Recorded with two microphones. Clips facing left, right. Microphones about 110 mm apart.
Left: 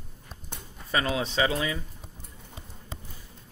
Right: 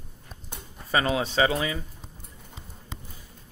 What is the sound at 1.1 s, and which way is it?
Speech, 55° right (ahead or behind).